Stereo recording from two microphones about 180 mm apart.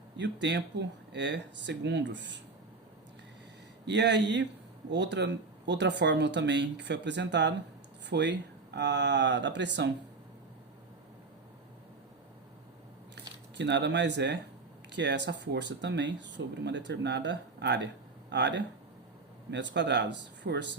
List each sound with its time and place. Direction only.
0.2 s speech: 75° right (ahead or behind)
3.8 s speech: 75° right (ahead or behind)
13.6 s speech: 75° right (ahead or behind)